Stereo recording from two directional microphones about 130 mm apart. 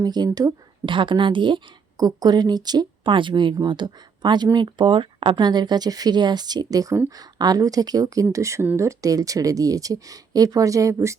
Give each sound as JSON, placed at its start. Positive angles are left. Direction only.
{"t": 0.0, "sound": "a woman's voice", "side_deg": -30}